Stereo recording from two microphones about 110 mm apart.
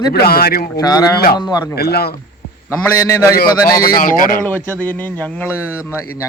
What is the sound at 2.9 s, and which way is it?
Speech, 25° left (ahead or behind).